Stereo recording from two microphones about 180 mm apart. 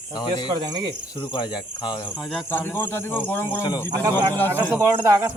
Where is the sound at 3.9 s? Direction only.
20° right (ahead or behind).